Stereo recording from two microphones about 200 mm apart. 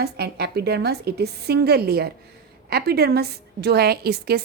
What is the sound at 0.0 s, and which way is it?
A woman's voice, 55° right (ahead or behind).